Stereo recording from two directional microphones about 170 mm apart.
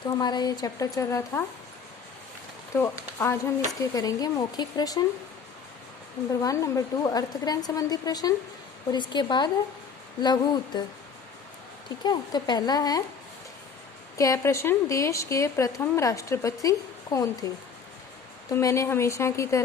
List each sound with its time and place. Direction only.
0.2 s a woman's voice: 25° left (ahead or behind)
2.7 s a woman's voice: 15° left (ahead or behind)
6.4 s a woman's voice: 20° left (ahead or behind)
12.0 s a woman's voice: 25° left (ahead or behind)
14.2 s a woman's voice: 20° left (ahead or behind)
18.5 s a woman's voice: 20° left (ahead or behind)